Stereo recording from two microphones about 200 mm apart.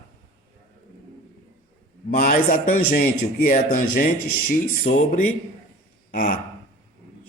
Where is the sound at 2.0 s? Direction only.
45° left (ahead or behind).